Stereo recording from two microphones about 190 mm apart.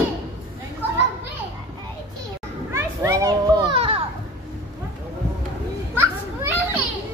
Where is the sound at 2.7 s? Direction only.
15° right (ahead or behind).